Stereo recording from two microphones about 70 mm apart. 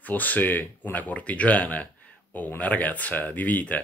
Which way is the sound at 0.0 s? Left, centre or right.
Left.